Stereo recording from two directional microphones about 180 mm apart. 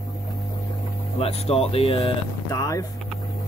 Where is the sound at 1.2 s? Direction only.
35° left (ahead or behind).